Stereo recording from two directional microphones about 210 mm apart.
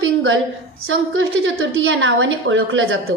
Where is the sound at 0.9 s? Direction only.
65° right (ahead or behind).